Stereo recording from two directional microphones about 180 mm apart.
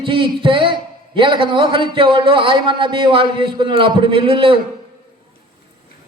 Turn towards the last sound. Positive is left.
turn(degrees=-30)  # may be behind; listen again after turning